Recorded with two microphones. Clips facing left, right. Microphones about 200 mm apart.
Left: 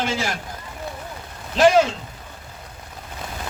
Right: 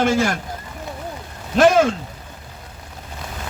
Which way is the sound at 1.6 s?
50° right (ahead or behind).